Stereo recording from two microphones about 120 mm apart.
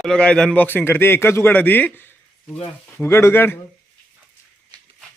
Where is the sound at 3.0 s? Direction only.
20° left (ahead or behind).